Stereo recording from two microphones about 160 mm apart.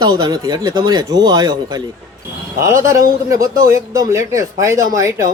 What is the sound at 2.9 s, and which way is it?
Speech, 20° right (ahead or behind).